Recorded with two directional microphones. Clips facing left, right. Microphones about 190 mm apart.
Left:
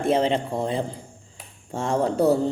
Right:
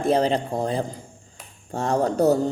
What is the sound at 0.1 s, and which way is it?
Speech, 35° right (ahead or behind).